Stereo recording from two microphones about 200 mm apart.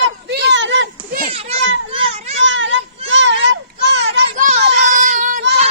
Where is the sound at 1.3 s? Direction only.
30° right (ahead or behind).